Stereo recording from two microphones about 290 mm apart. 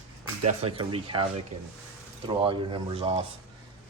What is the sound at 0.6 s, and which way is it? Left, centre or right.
Speech, centre.